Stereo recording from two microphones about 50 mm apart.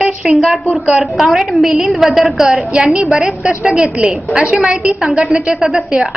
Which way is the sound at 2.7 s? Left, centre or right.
Centre.